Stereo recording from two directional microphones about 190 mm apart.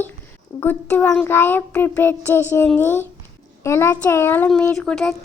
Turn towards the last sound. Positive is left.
turn(degrees=5)  # may be behind; listen again after turning